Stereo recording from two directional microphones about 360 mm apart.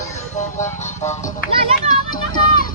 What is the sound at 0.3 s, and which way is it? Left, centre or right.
Music, centre.